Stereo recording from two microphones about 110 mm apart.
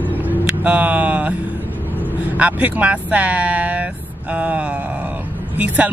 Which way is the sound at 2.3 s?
10° right (ahead or behind).